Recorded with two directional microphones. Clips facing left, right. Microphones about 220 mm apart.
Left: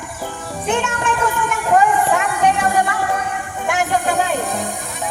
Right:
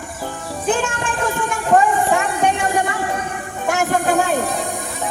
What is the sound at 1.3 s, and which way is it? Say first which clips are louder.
Music: right 4 dB; 30° right (ahead or behind).